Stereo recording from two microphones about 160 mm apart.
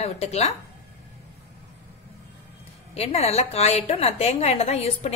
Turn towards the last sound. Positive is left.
turn(degrees=40)  # may be behind; listen again after turning